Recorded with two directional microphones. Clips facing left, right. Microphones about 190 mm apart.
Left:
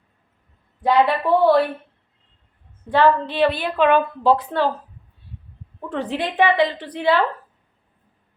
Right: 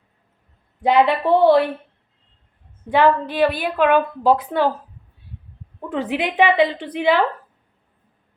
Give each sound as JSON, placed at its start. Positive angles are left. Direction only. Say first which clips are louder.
{"t": 0.8, "sound": "speech", "louder": "right 1 dB", "side_deg": -20}
{"t": 2.9, "sound": "a woman's voice", "louder": "even", "side_deg": -15}
{"t": 5.9, "sound": "a woman's voice", "louder": "right 2 dB", "side_deg": -15}